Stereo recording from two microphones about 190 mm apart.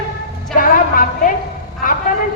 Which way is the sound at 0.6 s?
45° left (ahead or behind).